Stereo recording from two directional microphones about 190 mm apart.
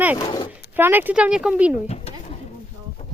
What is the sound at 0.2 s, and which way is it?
Speech, 25° left (ahead or behind).